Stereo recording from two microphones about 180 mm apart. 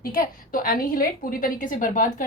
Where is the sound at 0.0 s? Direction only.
50° left (ahead or behind).